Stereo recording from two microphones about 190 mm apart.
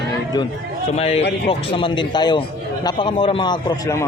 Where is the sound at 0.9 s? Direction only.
30° left (ahead or behind).